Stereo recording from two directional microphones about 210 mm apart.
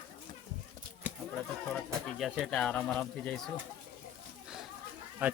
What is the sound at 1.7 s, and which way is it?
Speech, centre (ahead or behind).